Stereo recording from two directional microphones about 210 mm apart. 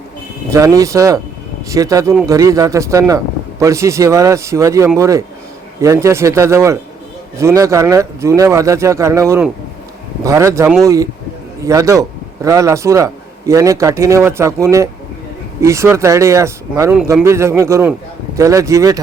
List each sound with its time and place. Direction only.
0.5 s a man's voice: 15° right (ahead or behind)